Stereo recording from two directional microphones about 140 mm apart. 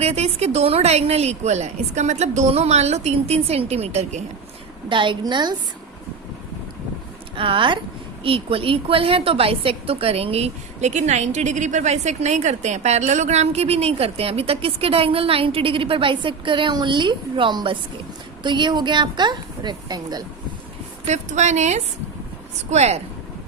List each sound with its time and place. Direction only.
0.0 s a woman's voice: 50° right (ahead or behind)
4.9 s a woman's voice: 35° right (ahead or behind)
7.3 s a woman's voice: 35° right (ahead or behind)
21.1 s a woman's voice: 55° right (ahead or behind)